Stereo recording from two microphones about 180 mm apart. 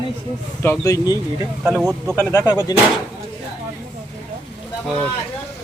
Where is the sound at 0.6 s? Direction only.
15° left (ahead or behind).